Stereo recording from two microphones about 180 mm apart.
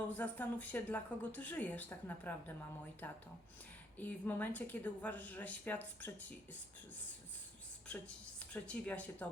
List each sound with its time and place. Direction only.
0.1 s speech: 10° left (ahead or behind)
7.9 s a woman's voice: 5° left (ahead or behind)